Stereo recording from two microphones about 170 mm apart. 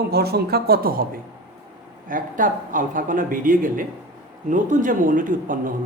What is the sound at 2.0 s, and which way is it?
A woman's voice, 50° right (ahead or behind).